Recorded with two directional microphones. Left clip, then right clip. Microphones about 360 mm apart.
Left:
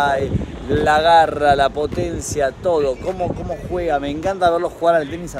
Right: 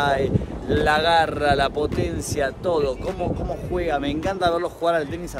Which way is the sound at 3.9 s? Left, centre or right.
Centre.